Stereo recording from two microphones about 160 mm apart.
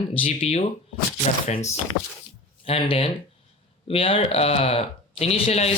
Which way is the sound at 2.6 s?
35° left (ahead or behind).